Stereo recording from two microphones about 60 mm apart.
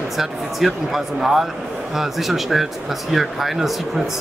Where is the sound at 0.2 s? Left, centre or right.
Centre.